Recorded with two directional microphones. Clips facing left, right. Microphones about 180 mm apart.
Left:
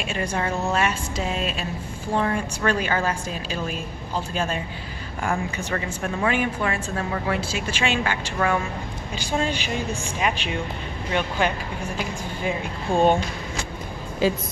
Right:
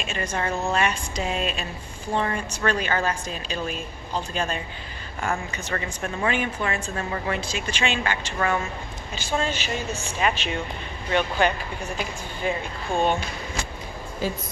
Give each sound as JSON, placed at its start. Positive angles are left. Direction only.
{"t": 0.0, "sound": "a woman's voice", "side_deg": 10}
{"t": 12.9, "sound": "speech", "side_deg": 35}
{"t": 14.2, "sound": "a woman's voice", "side_deg": 90}